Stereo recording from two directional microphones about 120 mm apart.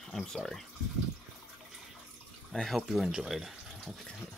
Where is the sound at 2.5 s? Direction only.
Centre (ahead or behind).